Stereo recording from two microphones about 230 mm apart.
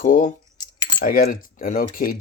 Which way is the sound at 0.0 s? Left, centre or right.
Left.